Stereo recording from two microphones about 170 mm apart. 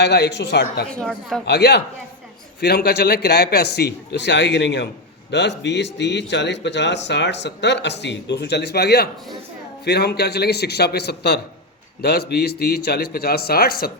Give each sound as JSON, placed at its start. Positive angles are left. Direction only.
{"t": 0.0, "sound": "speech", "side_deg": 80}
{"t": 0.9, "sound": "a woman's voice", "side_deg": 5}
{"t": 1.5, "sound": "a man's voice", "side_deg": 80}